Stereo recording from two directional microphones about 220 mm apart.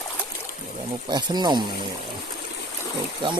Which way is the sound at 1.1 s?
20° right (ahead or behind).